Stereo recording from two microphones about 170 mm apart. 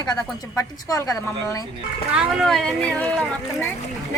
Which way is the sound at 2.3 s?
Centre (ahead or behind).